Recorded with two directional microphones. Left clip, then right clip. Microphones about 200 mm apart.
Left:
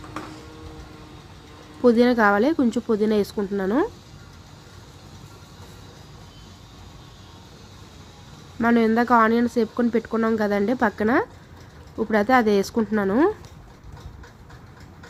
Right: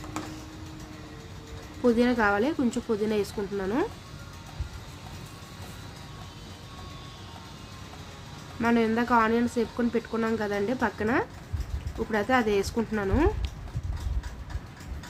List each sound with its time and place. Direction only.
1.8 s speech: 20° left (ahead or behind)
8.6 s speech: 15° left (ahead or behind)